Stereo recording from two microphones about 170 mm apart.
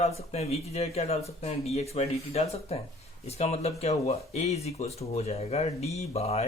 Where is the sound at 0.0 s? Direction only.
40° left (ahead or behind).